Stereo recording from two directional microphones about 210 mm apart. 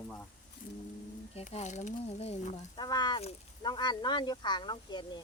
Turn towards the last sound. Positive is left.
turn(degrees=20)  # may be behind; listen again after turning